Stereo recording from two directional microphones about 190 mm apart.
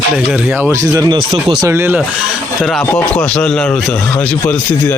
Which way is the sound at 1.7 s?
10° right (ahead or behind).